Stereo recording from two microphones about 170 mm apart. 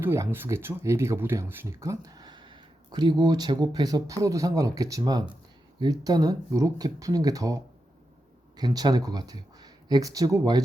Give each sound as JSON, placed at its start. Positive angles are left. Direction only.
{"t": 0.0, "sound": "speech", "side_deg": -15}